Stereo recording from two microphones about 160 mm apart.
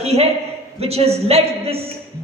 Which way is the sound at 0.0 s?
40° right (ahead or behind).